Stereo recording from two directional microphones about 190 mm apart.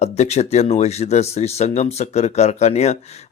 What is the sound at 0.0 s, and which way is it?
Speech, 35° left (ahead or behind).